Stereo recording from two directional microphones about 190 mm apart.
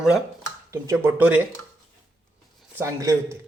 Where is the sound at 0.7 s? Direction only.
15° right (ahead or behind).